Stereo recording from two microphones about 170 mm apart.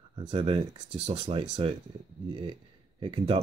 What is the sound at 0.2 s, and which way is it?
Speech, 30° right (ahead or behind).